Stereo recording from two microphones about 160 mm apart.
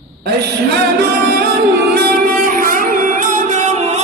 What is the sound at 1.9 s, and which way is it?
Music, 65° right (ahead or behind).